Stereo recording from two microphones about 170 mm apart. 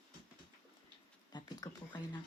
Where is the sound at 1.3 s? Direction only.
25° left (ahead or behind).